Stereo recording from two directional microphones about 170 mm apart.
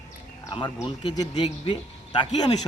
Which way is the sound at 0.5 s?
30° left (ahead or behind).